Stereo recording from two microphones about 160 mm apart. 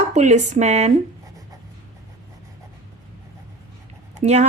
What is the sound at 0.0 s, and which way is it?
Speech, 45° right (ahead or behind).